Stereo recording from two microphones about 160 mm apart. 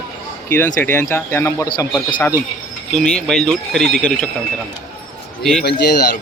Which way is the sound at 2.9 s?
5° left (ahead or behind).